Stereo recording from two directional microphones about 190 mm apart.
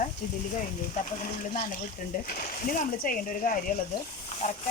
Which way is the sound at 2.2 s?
45° left (ahead or behind).